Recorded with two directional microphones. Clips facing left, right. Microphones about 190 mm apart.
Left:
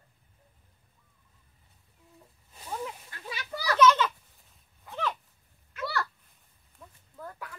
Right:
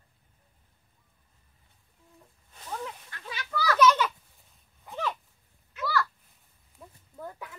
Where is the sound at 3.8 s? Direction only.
10° right (ahead or behind).